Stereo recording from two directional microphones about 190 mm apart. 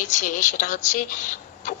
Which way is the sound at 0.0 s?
40° left (ahead or behind).